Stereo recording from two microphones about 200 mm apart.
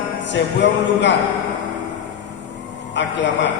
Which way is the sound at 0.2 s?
65° left (ahead or behind).